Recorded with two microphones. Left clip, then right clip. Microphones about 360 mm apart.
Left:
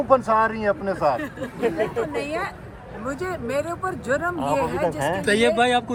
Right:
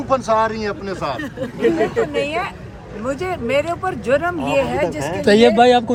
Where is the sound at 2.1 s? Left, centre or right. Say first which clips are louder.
Right 6 dB; centre.